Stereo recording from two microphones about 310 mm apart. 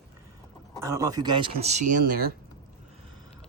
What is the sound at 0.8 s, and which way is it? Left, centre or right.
Speech, centre.